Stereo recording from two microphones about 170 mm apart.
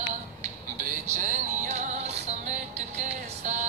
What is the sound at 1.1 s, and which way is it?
Music, 50° right (ahead or behind).